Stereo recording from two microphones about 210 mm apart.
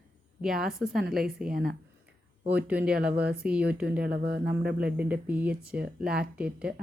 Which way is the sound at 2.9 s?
50° right (ahead or behind).